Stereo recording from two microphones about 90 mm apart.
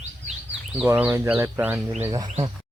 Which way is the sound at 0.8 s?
20° right (ahead or behind).